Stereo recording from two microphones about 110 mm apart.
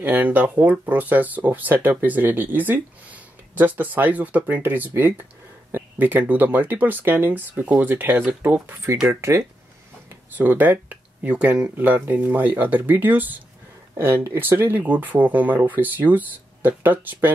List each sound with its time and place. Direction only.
0.0 s speech: 15° right (ahead or behind)